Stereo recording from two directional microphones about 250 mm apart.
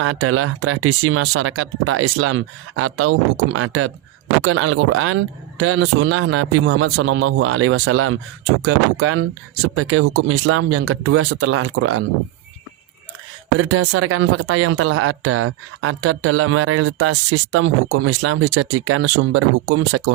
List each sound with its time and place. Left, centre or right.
0.0 s speech: right
13.6 s speech: right